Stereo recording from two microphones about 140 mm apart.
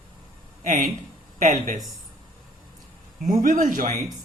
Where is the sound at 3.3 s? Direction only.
65° right (ahead or behind).